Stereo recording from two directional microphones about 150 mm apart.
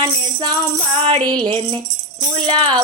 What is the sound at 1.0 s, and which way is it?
Music, 35° right (ahead or behind).